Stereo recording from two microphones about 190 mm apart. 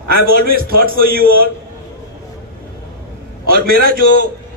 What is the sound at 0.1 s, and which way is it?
Speech, 50° right (ahead or behind).